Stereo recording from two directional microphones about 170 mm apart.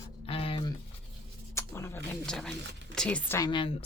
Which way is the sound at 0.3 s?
35° left (ahead or behind).